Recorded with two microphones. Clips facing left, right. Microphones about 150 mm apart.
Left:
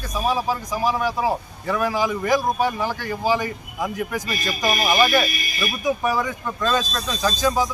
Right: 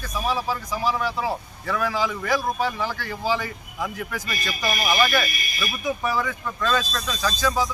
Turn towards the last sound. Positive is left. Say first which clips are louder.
# left 3 dB
turn(degrees=15)  # may be behind; listen again after turning